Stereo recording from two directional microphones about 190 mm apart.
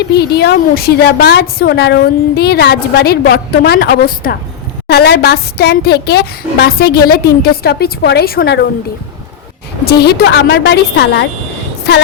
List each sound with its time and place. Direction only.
0.1 s a woman's voice: 60° left (ahead or behind)
9.8 s a woman's voice: 60° left (ahead or behind)